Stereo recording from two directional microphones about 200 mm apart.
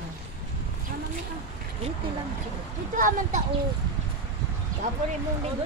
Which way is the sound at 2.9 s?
40° right (ahead or behind).